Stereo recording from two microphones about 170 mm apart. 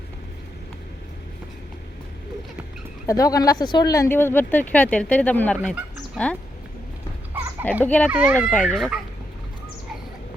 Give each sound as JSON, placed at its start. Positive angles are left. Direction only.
{"t": 3.1, "sound": "speech", "side_deg": 20}
{"t": 7.6, "sound": "speech", "side_deg": 10}
{"t": 8.1, "sound": "a child's voice", "side_deg": -10}
{"t": 8.4, "sound": "speech", "side_deg": 5}